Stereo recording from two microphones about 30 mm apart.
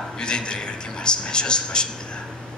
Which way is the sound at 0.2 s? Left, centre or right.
Left.